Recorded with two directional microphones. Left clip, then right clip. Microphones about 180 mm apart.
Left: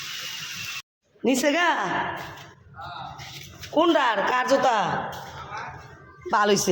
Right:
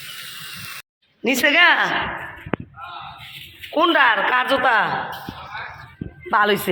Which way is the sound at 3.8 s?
20° left (ahead or behind).